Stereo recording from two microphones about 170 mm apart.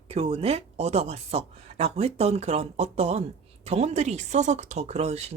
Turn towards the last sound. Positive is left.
turn(degrees=-40)  # may be behind; listen again after turning